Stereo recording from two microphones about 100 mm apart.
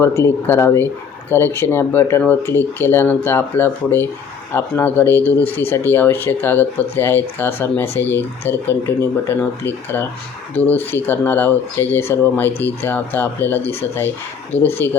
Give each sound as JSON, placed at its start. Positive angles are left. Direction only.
{"t": 0.0, "sound": "speech", "side_deg": 25}